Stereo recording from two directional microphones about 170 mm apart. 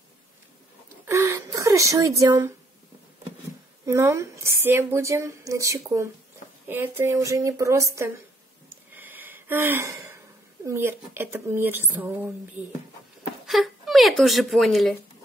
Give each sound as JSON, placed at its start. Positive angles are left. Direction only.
{"t": 1.0, "sound": "a sound", "side_deg": -15}
{"t": 3.8, "sound": "a woman's voice", "side_deg": -15}
{"t": 8.9, "sound": "gasp", "side_deg": -10}
{"t": 10.7, "sound": "a woman's voice", "side_deg": -15}
{"t": 13.5, "sound": "a woman's voice", "side_deg": 0}